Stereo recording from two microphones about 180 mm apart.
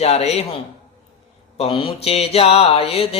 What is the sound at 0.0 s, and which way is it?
Mantra, 35° left (ahead or behind).